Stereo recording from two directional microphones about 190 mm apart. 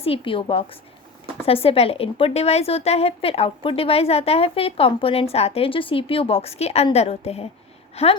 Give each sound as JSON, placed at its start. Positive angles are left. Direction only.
{"t": 0.0, "sound": "a woman's voice", "side_deg": 30}